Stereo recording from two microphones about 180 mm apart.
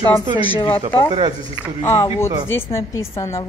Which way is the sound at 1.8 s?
15° left (ahead or behind).